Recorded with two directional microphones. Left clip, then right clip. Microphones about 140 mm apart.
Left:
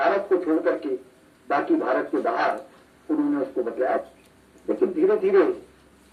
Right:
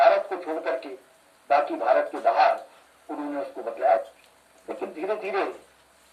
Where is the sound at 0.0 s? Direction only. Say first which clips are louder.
Right 2 dB; 25° right (ahead or behind).